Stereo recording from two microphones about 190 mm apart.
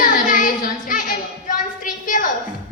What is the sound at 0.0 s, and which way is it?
Child singing, 45° left (ahead or behind).